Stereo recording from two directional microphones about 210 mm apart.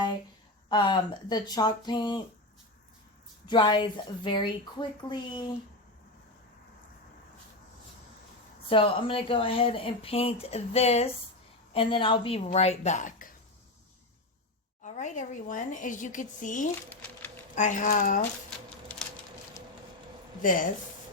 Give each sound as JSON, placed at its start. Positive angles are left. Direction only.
{"t": 0.7, "sound": "speech", "side_deg": 20}
{"t": 3.4, "sound": "speech", "side_deg": 20}
{"t": 8.7, "sound": "speech", "side_deg": 25}
{"t": 14.8, "sound": "speech", "side_deg": 35}
{"t": 16.9, "sound": "a sound", "side_deg": 10}
{"t": 17.5, "sound": "speech", "side_deg": 35}
{"t": 20.4, "sound": "speech", "side_deg": 40}